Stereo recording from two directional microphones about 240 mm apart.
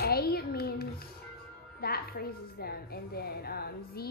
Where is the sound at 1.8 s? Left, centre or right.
Left.